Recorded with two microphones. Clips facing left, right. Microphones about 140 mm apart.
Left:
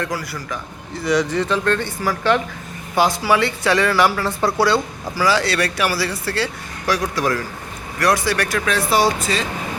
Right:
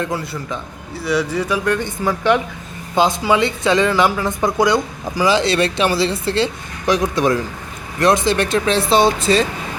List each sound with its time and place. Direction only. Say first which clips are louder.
0.0 s speech: right 2 dB; 25° right (ahead or behind)
0.9 s speech: left 1 dB; 5° right (ahead or behind); by 9.4 s 25° right (ahead or behind)